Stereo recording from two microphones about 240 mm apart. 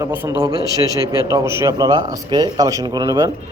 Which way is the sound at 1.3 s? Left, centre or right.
Centre.